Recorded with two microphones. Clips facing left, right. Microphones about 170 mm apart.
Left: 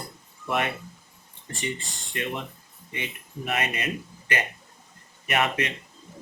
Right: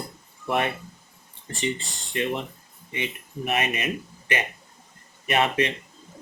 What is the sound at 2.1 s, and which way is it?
Speech, 25° right (ahead or behind).